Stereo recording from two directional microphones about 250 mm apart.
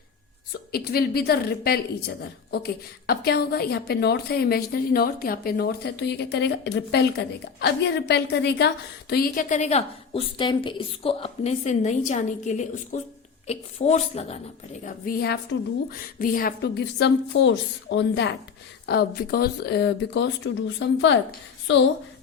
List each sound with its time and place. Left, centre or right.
0.7 s a woman's voice: left
14.8 s a woman's voice: left